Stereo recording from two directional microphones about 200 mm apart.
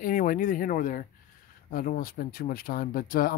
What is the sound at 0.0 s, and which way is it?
Speech, 45° left (ahead or behind).